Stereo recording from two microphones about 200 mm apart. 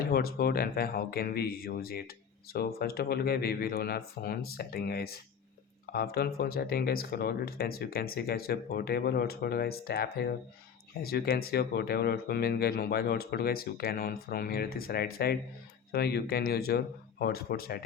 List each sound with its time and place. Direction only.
0.1 s speech: 50° left (ahead or behind)